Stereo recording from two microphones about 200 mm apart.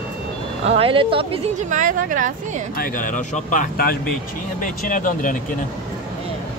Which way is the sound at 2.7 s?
45° left (ahead or behind).